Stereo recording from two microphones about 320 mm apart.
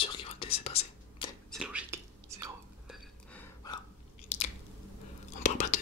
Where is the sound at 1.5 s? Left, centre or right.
Centre.